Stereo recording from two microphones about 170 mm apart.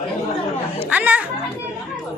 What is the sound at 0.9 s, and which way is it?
Speech, 10° right (ahead or behind).